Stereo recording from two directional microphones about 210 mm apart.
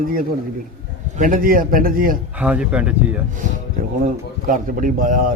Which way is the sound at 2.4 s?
5° right (ahead or behind).